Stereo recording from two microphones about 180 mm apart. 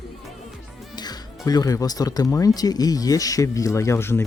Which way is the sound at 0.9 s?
20° left (ahead or behind).